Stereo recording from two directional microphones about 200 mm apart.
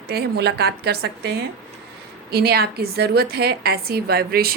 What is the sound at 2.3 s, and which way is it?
A woman's voice, 50° right (ahead or behind).